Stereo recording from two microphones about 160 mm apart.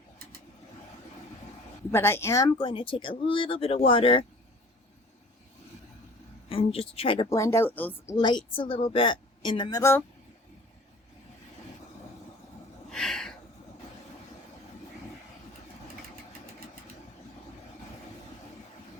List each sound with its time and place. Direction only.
1.9 s speech: 15° left (ahead or behind)
2.6 s a woman's voice: 35° left (ahead or behind)
6.5 s a woman's voice: 35° left (ahead or behind)
7.3 s speech: 20° left (ahead or behind)
8.1 s a woman's voice: 30° left (ahead or behind)
12.9 s a sound: 5° left (ahead or behind)